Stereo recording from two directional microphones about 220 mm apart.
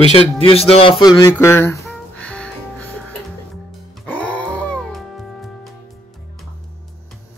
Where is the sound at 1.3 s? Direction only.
10° left (ahead or behind).